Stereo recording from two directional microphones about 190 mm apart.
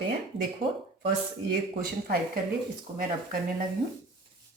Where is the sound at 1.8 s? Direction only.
50° right (ahead or behind).